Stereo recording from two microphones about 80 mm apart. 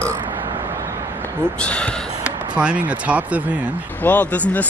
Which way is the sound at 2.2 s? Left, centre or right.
Centre.